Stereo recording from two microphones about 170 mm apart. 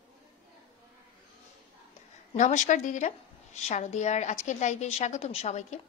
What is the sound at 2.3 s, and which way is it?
A woman's voice, 45° left (ahead or behind).